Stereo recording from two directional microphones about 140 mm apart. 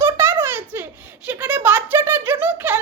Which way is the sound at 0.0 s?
15° right (ahead or behind).